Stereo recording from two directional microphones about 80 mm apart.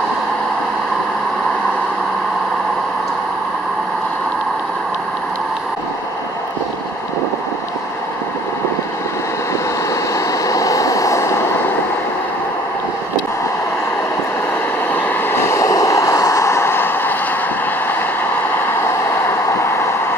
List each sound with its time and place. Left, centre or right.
10.1 s vehicle: left
15.0 s vehicle: left